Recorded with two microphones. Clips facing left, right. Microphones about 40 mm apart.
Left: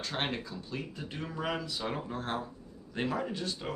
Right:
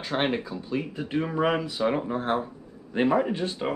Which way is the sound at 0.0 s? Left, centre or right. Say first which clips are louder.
Right 8 dB; right.